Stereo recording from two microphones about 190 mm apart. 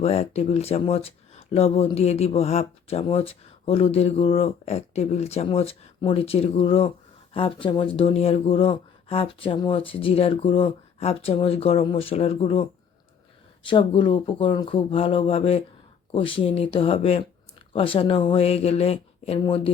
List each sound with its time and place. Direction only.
0.0 s speech: 35° left (ahead or behind)
13.7 s speech: 25° left (ahead or behind)